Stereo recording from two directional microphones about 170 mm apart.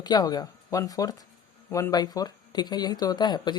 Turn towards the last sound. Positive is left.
turn(degrees=25)  # may be behind; listen again after turning